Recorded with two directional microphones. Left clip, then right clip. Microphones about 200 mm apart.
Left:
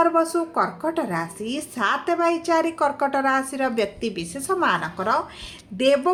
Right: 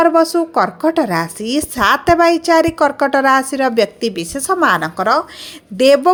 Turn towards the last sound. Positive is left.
turn(degrees=-50)  # may be behind; listen again after turning